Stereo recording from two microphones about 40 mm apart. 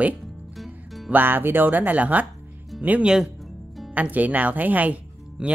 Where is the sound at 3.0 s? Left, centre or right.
Centre.